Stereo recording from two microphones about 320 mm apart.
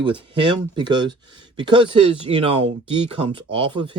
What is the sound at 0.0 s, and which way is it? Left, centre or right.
Speech, centre.